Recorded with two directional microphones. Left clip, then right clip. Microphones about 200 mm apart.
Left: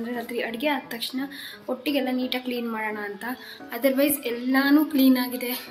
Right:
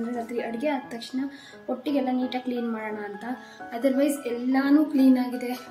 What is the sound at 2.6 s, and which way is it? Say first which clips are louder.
A woman's voice: left 2 dB; centre (ahead or behind).